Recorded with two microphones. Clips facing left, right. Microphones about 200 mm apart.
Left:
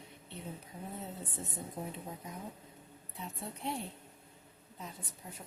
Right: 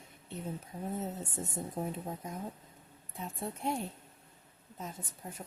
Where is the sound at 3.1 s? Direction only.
50° right (ahead or behind).